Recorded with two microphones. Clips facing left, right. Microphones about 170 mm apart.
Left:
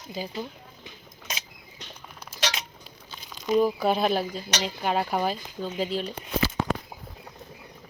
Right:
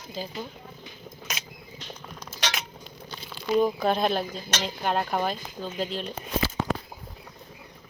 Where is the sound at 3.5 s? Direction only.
5° left (ahead or behind).